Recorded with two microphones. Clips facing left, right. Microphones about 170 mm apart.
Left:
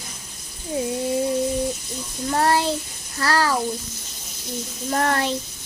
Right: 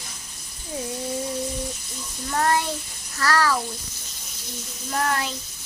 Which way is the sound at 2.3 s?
30° left (ahead or behind).